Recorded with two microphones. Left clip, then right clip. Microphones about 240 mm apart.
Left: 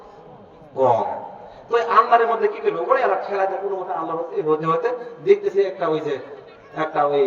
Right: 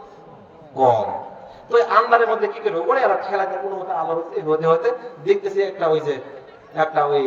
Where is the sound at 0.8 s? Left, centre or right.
Right.